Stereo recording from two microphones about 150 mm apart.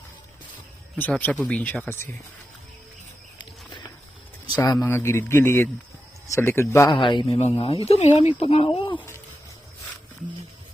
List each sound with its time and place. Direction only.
0.9 s speech: 10° left (ahead or behind)
4.4 s speech: 25° left (ahead or behind)
6.9 s speech: 30° left (ahead or behind)